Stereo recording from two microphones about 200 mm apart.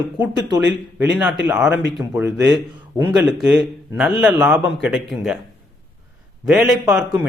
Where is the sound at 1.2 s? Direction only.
5° right (ahead or behind).